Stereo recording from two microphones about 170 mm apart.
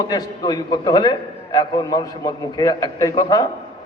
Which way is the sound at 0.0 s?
25° left (ahead or behind).